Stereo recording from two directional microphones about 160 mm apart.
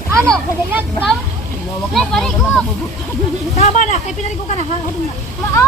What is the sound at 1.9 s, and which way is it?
Speech, 5° left (ahead or behind).